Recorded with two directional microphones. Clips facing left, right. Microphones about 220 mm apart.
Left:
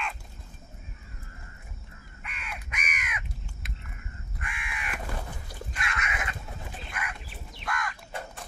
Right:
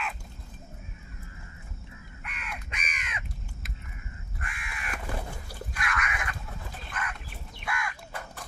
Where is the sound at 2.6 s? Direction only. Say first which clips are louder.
Left 2 dB; 30° right (ahead or behind).